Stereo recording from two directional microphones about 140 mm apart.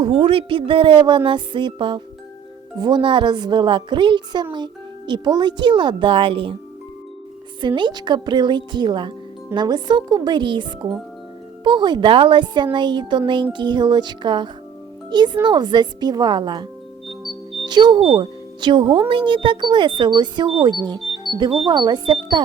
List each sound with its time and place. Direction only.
0.0 s speech: 40° right (ahead or behind)
7.8 s speech: 30° right (ahead or behind)